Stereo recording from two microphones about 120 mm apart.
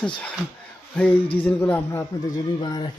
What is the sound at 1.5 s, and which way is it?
Speech, 15° left (ahead or behind).